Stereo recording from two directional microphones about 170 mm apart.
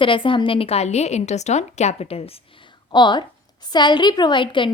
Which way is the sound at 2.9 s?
25° left (ahead or behind).